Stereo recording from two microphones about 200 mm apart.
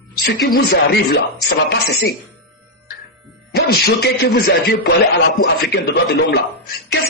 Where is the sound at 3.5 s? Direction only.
55° left (ahead or behind).